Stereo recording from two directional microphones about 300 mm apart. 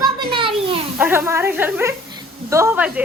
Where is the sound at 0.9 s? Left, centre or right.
Centre.